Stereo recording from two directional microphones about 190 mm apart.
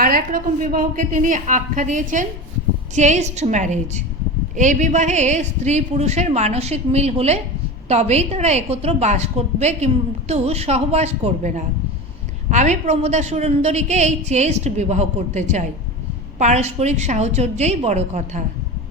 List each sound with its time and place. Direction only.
0.0 s a woman's voice: 50° right (ahead or behind)